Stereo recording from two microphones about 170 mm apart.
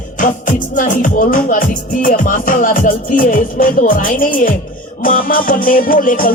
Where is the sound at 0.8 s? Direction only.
50° left (ahead or behind).